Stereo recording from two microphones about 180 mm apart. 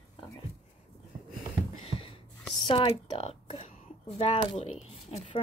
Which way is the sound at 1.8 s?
30° left (ahead or behind).